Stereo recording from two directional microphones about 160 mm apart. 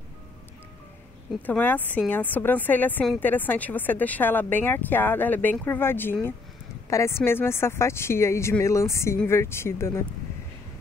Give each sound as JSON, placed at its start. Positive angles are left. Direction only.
{"t": 1.4, "sound": "speech", "side_deg": 10}